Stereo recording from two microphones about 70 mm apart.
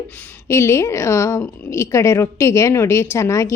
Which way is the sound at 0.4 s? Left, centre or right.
Left.